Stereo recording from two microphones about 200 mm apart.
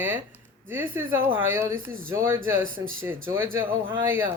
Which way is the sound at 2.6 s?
90° right.